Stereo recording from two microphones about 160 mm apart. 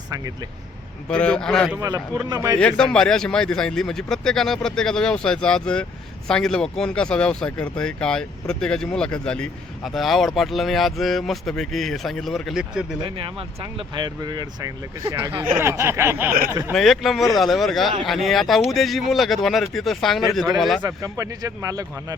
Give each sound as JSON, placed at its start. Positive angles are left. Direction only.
{"t": 1.0, "sound": "speech", "side_deg": 5}
{"t": 2.3, "sound": "speech", "side_deg": -20}
{"t": 2.6, "sound": "speech", "side_deg": 5}
{"t": 13.6, "sound": "speech", "side_deg": -30}
{"t": 16.7, "sound": "speech", "side_deg": 0}
{"t": 20.8, "sound": "speech", "side_deg": -20}